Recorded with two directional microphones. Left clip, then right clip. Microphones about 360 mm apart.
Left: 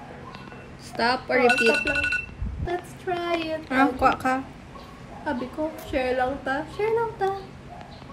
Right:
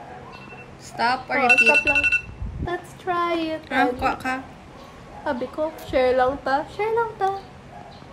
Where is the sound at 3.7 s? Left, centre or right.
Centre.